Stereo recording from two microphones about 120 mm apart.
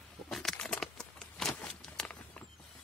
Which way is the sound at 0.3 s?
5° left (ahead or behind).